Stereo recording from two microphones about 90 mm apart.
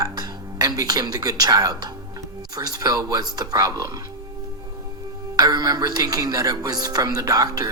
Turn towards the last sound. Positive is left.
turn(degrees=-45)  # may be behind; listen again after turning